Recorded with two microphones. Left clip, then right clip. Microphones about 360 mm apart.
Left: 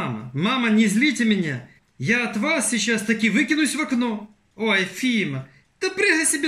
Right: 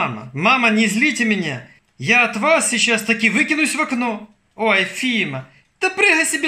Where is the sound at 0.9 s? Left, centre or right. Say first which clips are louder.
Right 3 dB; right.